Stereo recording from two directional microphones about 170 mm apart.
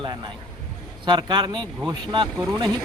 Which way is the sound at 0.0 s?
30° right (ahead or behind).